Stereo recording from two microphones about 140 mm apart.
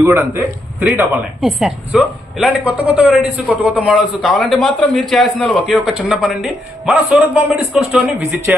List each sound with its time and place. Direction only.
0.0 s a man's voice: 20° right (ahead or behind)
1.4 s a man's voice: centre (ahead or behind)